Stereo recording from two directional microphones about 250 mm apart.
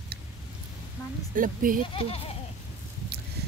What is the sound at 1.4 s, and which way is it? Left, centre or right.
Speech, right.